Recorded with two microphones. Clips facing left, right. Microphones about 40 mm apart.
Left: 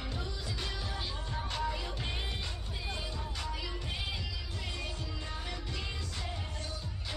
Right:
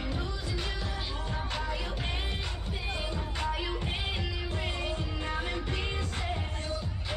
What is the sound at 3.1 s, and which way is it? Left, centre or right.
Music, right.